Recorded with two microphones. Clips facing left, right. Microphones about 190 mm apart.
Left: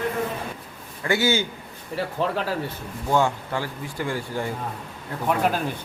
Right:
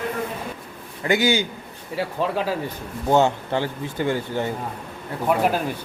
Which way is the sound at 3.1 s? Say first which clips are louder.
Right 4 dB; 25° right (ahead or behind).